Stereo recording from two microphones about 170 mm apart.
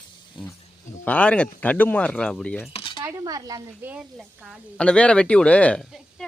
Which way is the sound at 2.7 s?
30° left (ahead or behind).